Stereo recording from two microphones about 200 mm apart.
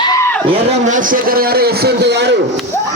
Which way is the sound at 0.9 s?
40° right (ahead or behind).